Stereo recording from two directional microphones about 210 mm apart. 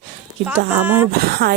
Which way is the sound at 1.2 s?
50° right (ahead or behind).